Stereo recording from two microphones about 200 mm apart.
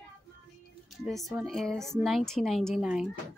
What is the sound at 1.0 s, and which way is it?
Speech, centre (ahead or behind).